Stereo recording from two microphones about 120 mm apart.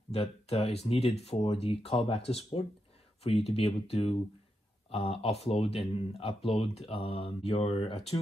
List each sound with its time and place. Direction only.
0.1 s speech: 60° left (ahead or behind)